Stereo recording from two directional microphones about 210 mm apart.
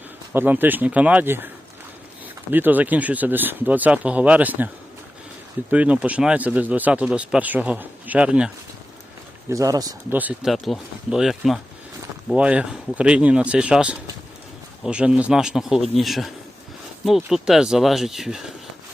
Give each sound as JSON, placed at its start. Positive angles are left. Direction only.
{"t": 0.3, "sound": "speech", "side_deg": -10}
{"t": 2.5, "sound": "speech", "side_deg": -10}
{"t": 5.7, "sound": "speech", "side_deg": -5}
{"t": 9.5, "sound": "speech", "side_deg": -15}
{"t": 10.2, "sound": "speech", "side_deg": -5}